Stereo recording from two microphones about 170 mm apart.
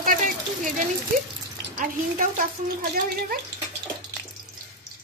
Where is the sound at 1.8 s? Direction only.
50° right (ahead or behind).